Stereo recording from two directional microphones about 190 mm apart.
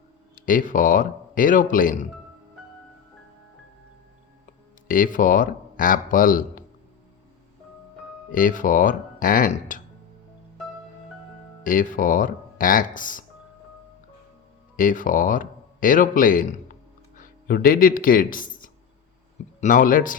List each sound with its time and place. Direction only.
0.3 s speech: 45° left (ahead or behind)
4.9 s speech: 45° left (ahead or behind)
8.3 s speech: 45° left (ahead or behind)
11.6 s speech: 45° left (ahead or behind)
14.8 s speech: 45° left (ahead or behind)